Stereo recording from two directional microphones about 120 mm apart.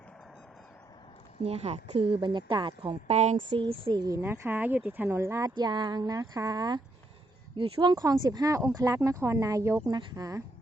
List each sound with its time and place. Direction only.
1.5 s speech: 60° right (ahead or behind)
2.2 s speech: 40° right (ahead or behind)
3.1 s speech: 70° right (ahead or behind)
3.5 s speech: 45° right (ahead or behind)
4.2 s speech: 15° right (ahead or behind)
5.5 s speech: 35° right (ahead or behind)
9.8 s speech: 35° right (ahead or behind)